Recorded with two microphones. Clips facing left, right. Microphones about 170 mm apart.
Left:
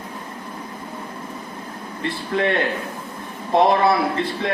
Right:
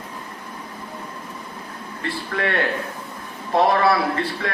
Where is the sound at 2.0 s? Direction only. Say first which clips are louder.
Left 3 dB; 20° left (ahead or behind).